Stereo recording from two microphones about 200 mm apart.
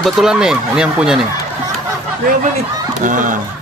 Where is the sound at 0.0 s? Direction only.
Centre (ahead or behind).